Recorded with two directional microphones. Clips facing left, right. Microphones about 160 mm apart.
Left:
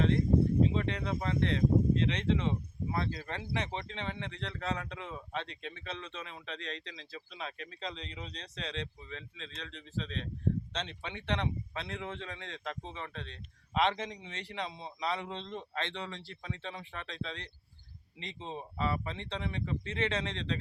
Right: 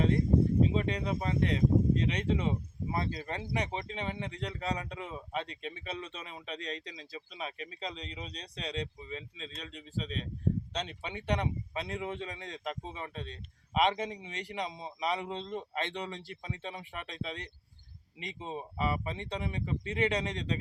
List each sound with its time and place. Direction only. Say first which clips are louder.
0.7 s speech: right 2 dB; 15° right (ahead or behind)